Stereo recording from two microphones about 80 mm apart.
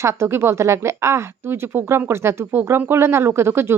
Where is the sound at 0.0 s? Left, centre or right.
Right.